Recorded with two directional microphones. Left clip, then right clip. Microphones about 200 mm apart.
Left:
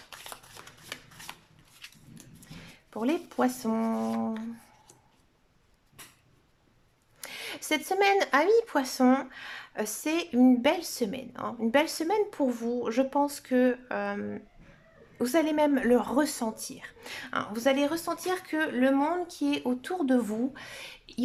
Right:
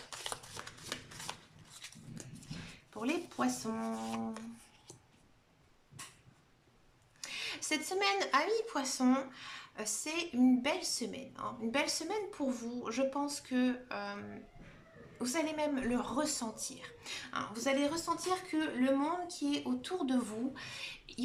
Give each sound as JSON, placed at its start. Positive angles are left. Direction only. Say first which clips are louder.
{"t": 0.1, "sound": "shuffling cards", "louder": "right 1 dB", "side_deg": 0}
{"t": 2.9, "sound": "speech", "louder": "left 7 dB", "side_deg": 35}
{"t": 7.2, "sound": "speech", "louder": "left 2 dB", "side_deg": 40}